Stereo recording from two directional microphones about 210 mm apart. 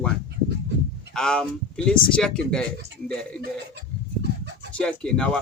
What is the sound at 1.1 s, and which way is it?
Speech, 5° left (ahead or behind).